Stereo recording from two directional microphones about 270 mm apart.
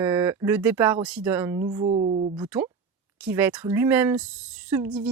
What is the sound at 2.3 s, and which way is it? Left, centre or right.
Speech, centre.